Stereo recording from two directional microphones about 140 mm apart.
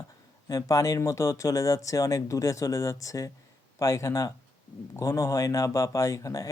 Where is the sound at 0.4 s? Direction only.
25° left (ahead or behind).